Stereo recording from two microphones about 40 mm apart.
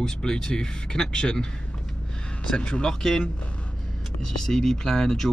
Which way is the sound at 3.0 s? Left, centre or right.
Centre.